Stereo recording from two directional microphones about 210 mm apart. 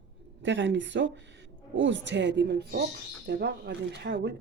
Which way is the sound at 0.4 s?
60° right (ahead or behind).